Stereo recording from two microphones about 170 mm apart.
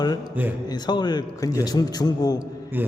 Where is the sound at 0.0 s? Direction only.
25° left (ahead or behind).